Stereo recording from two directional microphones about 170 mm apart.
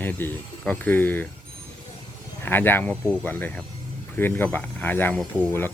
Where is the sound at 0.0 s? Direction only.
10° left (ahead or behind).